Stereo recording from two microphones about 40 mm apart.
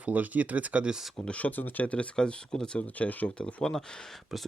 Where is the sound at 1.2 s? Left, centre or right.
Left.